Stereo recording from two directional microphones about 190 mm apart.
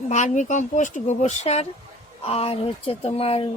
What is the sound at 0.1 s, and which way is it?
A child's voice, 40° left (ahead or behind).